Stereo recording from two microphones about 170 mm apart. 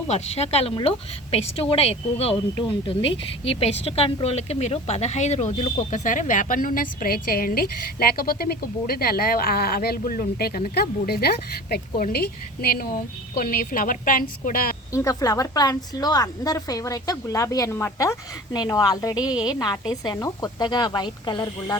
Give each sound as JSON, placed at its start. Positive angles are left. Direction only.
{"t": 0.1, "sound": "a woman's voice", "side_deg": 35}
{"t": 14.9, "sound": "a woman's voice", "side_deg": 20}